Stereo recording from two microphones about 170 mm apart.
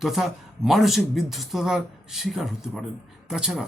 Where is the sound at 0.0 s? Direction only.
Centre (ahead or behind).